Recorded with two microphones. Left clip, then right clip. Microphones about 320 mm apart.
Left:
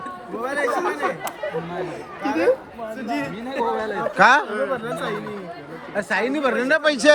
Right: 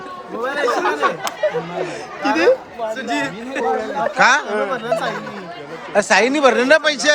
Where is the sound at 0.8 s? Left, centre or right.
Right.